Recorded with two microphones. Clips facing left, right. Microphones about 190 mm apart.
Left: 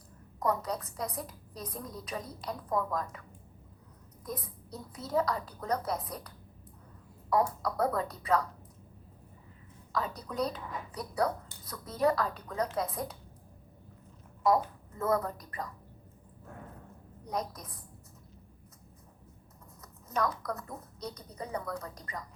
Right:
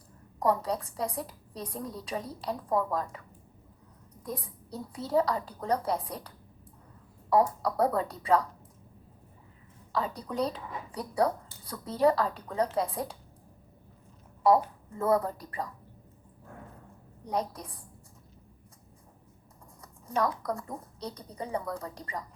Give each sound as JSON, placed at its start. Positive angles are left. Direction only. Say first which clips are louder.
{"t": 0.3, "sound": "a woman's voice", "louder": "right 4 dB", "side_deg": -30}
{"t": 4.3, "sound": "a woman's voice", "louder": "right 2 dB", "side_deg": -30}
{"t": 9.9, "sound": "a woman's voice", "louder": "right 3 dB", "side_deg": -30}
{"t": 14.4, "sound": "speech", "louder": "right 4 dB", "side_deg": -30}
{"t": 17.2, "sound": "a woman's voice", "louder": "right 4 dB", "side_deg": -30}
{"t": 19.8, "sound": "a woman's voice", "louder": "right 3 dB", "side_deg": -30}